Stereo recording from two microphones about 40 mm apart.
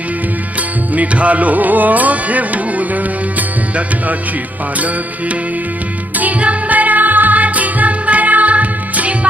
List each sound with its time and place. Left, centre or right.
0.9 s music: right
6.4 s music: right